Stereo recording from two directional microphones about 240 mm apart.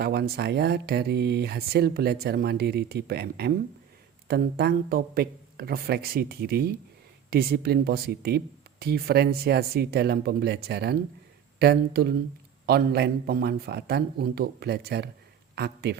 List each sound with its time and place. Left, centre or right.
0.0 s speech: right